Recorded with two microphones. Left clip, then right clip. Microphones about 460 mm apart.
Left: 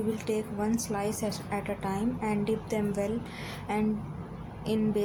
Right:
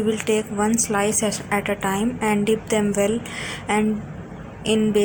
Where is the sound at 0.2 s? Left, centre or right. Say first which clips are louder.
Right 10 dB; right.